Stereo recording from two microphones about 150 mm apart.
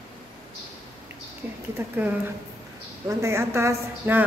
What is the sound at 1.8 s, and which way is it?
Speech, 15° right (ahead or behind).